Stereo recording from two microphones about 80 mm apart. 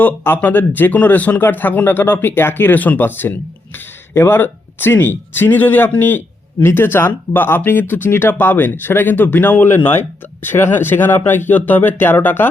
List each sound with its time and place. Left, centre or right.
0.0 s speech: left